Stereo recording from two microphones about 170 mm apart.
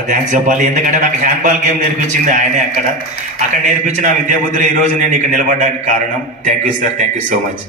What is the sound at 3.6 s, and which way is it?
A man's voice, 45° right (ahead or behind).